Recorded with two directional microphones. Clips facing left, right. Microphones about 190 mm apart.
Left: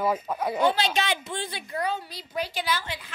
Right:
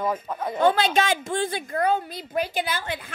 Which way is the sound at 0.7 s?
50° right (ahead or behind).